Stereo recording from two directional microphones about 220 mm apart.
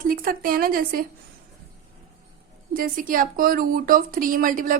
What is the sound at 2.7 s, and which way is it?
Speech, 40° right (ahead or behind).